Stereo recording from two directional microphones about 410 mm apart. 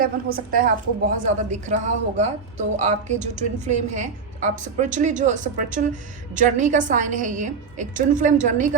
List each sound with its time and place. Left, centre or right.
0.0 s a woman's voice: right